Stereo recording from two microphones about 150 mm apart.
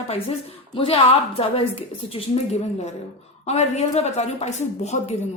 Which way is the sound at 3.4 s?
45° left (ahead or behind).